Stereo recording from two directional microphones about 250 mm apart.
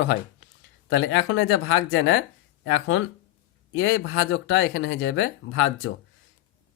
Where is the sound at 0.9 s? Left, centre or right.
Left.